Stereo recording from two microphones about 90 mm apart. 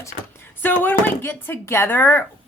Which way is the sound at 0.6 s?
20° left (ahead or behind).